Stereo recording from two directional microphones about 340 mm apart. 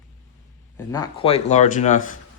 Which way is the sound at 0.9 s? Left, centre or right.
Centre.